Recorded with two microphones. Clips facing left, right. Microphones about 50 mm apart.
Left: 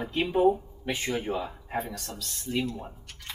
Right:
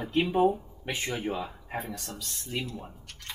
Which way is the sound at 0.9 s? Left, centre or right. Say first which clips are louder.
Left 2 dB; right.